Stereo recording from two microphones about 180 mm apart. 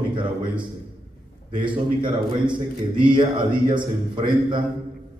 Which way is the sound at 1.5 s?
25° right (ahead or behind).